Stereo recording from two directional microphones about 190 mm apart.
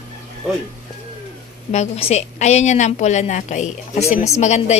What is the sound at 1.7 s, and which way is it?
A woman's voice, 35° left (ahead or behind).